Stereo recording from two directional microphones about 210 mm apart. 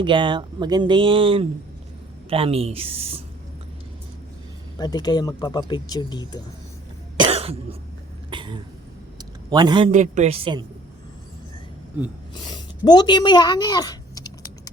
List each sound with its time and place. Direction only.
0.0 s speech: 20° right (ahead or behind)
4.8 s speech: 20° left (ahead or behind)
7.2 s cough: 25° right (ahead or behind)
9.1 s a sound: 20° right (ahead or behind)
9.9 s speech: 35° right (ahead or behind)
12.3 s a woman's voice: 20° left (ahead or behind)